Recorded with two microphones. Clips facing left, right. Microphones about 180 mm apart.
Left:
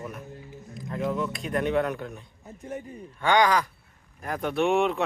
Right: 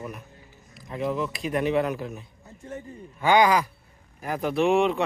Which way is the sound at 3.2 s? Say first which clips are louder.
Right 2 dB; 10° right (ahead or behind).